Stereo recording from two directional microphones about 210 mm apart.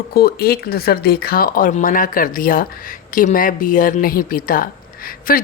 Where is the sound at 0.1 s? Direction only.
45° left (ahead or behind).